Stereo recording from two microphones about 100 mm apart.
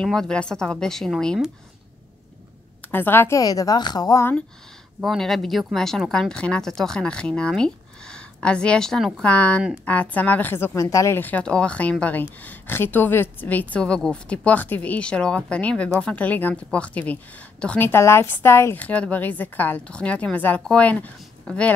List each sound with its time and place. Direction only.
0.0 s a woman's voice: 5° left (ahead or behind)
2.9 s a woman's voice: 20° left (ahead or behind)
3.3 s a woman's voice: 35° left (ahead or behind)
5.0 s a woman's voice: centre (ahead or behind); by 11.1 s 30° left (ahead or behind)
11.1 s a woman's voice: 15° left (ahead or behind)
18.9 s a woman's voice: 15° left (ahead or behind)